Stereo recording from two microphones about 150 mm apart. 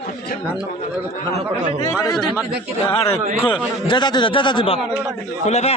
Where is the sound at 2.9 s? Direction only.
40° left (ahead or behind).